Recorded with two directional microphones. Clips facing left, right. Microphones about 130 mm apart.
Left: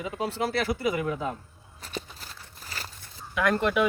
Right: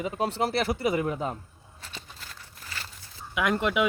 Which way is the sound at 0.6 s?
35° right (ahead or behind).